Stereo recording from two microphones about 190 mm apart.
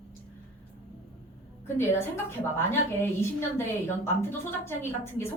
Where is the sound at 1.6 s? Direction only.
10° left (ahead or behind).